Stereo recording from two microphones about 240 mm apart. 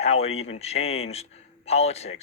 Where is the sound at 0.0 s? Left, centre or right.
Left.